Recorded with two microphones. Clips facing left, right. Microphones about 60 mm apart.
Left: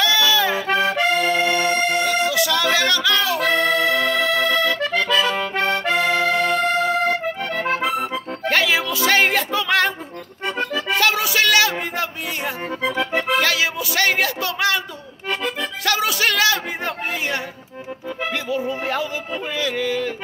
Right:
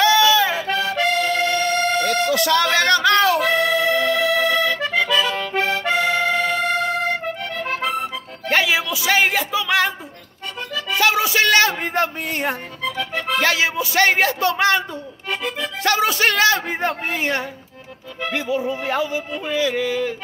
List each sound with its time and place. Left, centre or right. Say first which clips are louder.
0.3 s music: right 2 dB; right
0.6 s accordion: left 2 dB; left
2.2 s music: right 2 dB; right
2.7 s speech: right 3 dB; right
3.3 s accordion: even; centre
6.1 s accordion: left 1 dB; centre
8.5 s music: even; centre
11.0 s music: right 2 dB; right
12.8 s accordion: left 3 dB; left
13.4 s speech: right 1 dB; right
15.8 s speech: right 3 dB; right
18.3 s speech: right 3 dB; centre